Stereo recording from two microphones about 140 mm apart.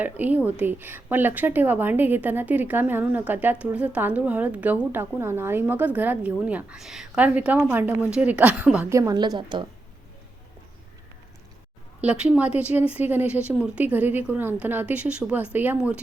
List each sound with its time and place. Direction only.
0.0 s a woman's voice: 10° right (ahead or behind)
8.9 s a woman's voice: 25° right (ahead or behind)
11.9 s a woman's voice: 10° right (ahead or behind)